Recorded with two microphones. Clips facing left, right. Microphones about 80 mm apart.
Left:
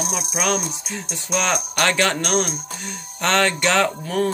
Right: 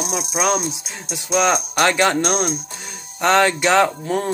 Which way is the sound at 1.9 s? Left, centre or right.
Centre.